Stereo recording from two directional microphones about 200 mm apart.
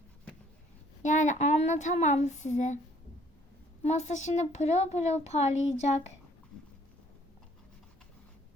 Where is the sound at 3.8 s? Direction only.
35° left (ahead or behind).